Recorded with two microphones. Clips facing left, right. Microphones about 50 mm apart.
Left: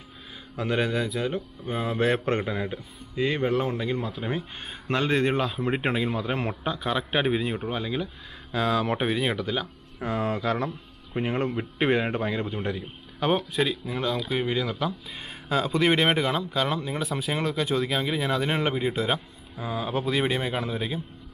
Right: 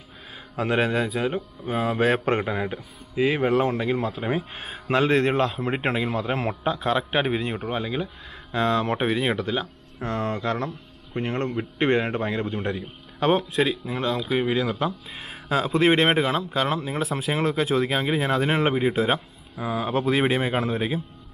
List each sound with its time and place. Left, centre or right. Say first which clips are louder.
0.7 s a man's voice: right 3 dB; centre
18.2 s a man's voice: right 3 dB; right
18.5 s a man's voice: right 4 dB; centre